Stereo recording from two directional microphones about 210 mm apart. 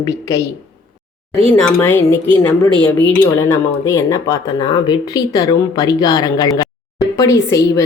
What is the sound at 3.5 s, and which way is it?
Speech, 15° left (ahead or behind).